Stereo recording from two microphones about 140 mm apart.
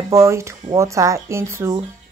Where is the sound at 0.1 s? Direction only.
20° right (ahead or behind).